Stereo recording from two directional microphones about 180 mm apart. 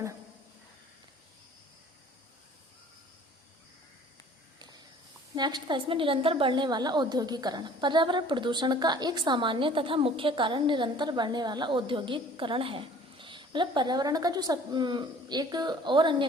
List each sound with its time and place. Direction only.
5.3 s a woman's voice: 25° right (ahead or behind)